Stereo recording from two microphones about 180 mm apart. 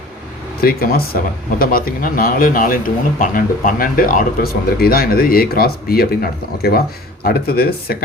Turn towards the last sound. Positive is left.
turn(degrees=60)  # may be behind; listen again after turning